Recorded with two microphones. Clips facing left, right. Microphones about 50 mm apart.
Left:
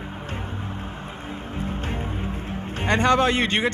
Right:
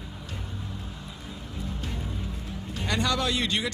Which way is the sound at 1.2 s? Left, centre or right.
Left.